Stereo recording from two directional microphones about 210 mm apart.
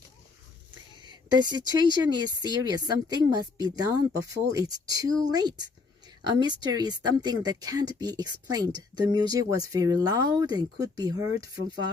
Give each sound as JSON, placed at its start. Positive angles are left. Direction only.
{"t": 1.0, "sound": "speech", "side_deg": -20}